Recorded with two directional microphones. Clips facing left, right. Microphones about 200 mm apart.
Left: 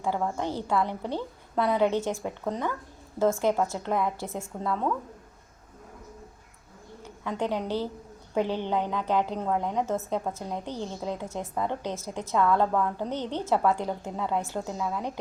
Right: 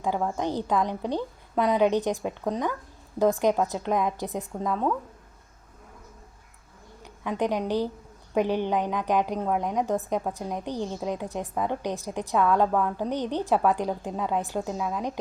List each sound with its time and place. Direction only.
0.0 s a woman's voice: 15° right (ahead or behind)
7.0 s a woman's voice: 15° right (ahead or behind)